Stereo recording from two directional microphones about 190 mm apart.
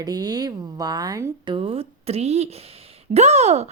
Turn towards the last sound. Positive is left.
turn(degrees=-35)  # may be behind; listen again after turning